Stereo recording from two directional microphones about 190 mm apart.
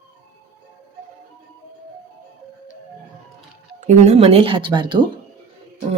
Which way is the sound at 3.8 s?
35° right (ahead or behind).